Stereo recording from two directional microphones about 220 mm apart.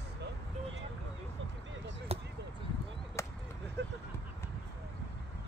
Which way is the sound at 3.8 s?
50° right (ahead or behind).